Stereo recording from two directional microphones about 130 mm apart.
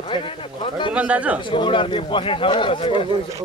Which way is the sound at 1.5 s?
40° left (ahead or behind).